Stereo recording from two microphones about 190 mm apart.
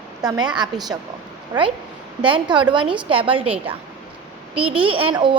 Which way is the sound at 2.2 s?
25° right (ahead or behind).